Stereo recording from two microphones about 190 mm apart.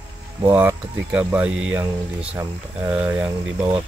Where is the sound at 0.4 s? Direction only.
10° right (ahead or behind).